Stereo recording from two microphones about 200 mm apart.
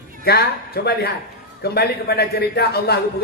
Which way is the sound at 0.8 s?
50° left (ahead or behind).